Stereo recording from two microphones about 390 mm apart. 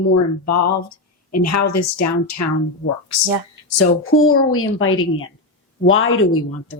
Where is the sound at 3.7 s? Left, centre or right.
Left.